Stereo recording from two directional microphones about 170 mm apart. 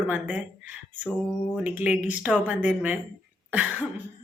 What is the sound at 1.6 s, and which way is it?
Speech, 10° right (ahead or behind).